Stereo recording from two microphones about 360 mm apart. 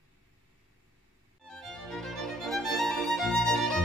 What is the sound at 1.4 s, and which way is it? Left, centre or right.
Music, centre.